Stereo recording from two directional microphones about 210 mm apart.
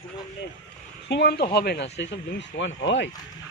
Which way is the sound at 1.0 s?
50° left (ahead or behind).